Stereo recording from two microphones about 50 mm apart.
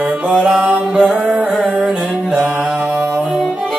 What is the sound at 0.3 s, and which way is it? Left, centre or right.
Mantra, centre.